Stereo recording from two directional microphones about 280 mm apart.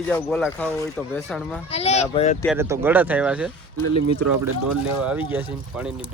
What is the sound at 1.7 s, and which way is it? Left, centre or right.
Speech, left.